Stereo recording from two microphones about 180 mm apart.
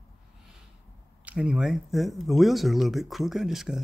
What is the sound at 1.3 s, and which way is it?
Speech, 5° right (ahead or behind).